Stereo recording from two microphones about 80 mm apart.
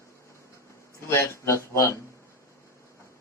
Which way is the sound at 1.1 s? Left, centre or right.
Left.